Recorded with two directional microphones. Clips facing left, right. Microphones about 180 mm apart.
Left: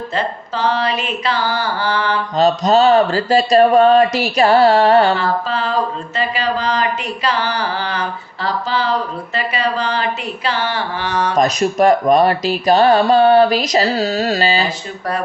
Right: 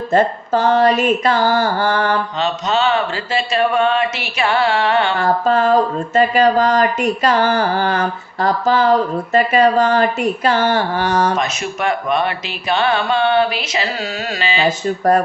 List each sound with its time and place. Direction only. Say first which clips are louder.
0.1 s speech: right 10 dB; 45° right (ahead or behind)
2.4 s speech: left 9 dB; 40° left (ahead or behind)
5.1 s speech: right 4 dB; 50° right (ahead or behind)
11.3 s speech: left 7 dB; 40° left (ahead or behind)
14.8 s speech: right 9 dB; 45° right (ahead or behind)